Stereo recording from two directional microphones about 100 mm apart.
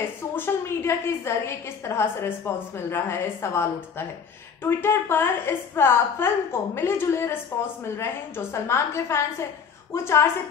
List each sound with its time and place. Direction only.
0.0 s a woman's voice: 25° left (ahead or behind)
4.6 s a woman's voice: 25° left (ahead or behind)